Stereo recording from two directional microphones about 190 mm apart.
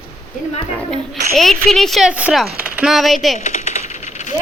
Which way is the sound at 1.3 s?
Centre (ahead or behind).